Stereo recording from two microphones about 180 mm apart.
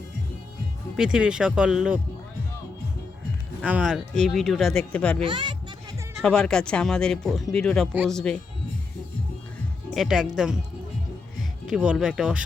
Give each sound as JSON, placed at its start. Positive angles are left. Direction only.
{"t": 0.9, "sound": "speech", "side_deg": -5}
{"t": 3.6, "sound": "speech", "side_deg": -5}
{"t": 5.2, "sound": "speech", "side_deg": -25}
{"t": 6.2, "sound": "speech", "side_deg": 5}
{"t": 9.9, "sound": "speech", "side_deg": 0}
{"t": 11.7, "sound": "speech", "side_deg": -5}